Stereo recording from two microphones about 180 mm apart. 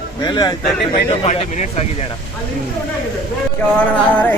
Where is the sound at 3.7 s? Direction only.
10° left (ahead or behind).